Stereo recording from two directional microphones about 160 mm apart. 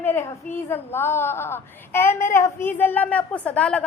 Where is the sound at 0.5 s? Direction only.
15° left (ahead or behind).